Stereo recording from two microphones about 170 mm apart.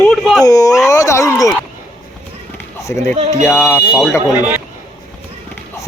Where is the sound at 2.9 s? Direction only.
15° left (ahead or behind).